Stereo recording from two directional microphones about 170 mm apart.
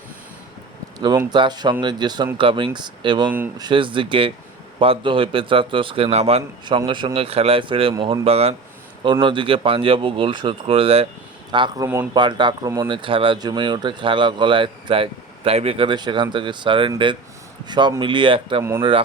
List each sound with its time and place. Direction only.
1.3 s a man's voice: 25° right (ahead or behind)